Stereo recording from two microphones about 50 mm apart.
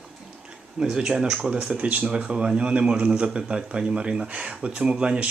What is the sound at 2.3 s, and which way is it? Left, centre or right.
Speech, centre.